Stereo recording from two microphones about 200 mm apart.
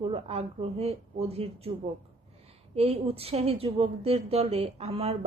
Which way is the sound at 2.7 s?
30° right (ahead or behind).